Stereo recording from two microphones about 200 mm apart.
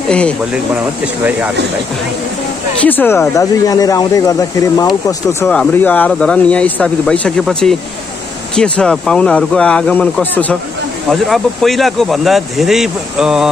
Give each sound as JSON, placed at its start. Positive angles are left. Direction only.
{"t": 0.1, "sound": "speech", "side_deg": 5}
{"t": 2.8, "sound": "speech", "side_deg": 10}